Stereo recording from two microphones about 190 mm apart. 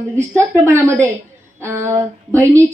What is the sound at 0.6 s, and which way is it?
Speech, 15° right (ahead or behind).